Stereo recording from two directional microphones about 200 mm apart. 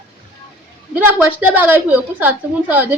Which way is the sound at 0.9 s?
10° right (ahead or behind).